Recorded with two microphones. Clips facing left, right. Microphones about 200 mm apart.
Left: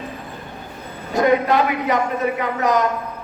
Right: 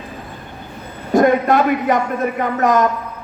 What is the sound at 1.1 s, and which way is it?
A man's voice, 50° right (ahead or behind).